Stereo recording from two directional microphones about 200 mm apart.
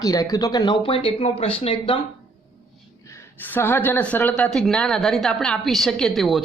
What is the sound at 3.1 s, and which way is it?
A woman's voice, 10° left (ahead or behind).